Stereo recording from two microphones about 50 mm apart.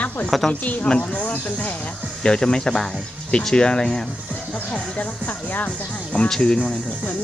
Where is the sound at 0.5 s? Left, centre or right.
Left.